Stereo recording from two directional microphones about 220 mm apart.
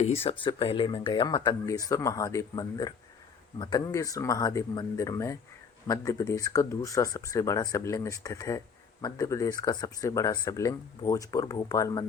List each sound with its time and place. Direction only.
0.0 s speech: 30° left (ahead or behind)